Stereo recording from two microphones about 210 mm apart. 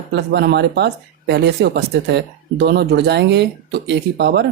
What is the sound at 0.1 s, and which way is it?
Speech, 55° right (ahead or behind).